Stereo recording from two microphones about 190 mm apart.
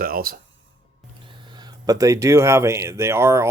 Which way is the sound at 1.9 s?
15° right (ahead or behind).